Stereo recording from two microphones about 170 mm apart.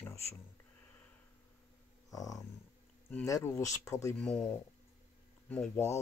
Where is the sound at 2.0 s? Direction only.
20° left (ahead or behind).